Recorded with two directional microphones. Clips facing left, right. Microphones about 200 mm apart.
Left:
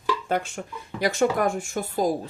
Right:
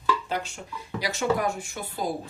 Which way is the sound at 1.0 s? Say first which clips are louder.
Left 4 dB; 50° left (ahead or behind).